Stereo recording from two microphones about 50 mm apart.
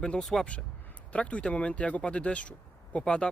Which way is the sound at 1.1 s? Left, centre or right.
Left.